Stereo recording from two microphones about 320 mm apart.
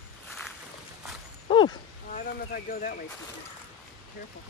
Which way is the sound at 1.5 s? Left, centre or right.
Centre.